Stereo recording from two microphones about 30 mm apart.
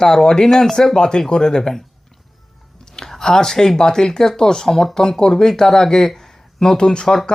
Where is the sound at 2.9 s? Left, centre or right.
Left.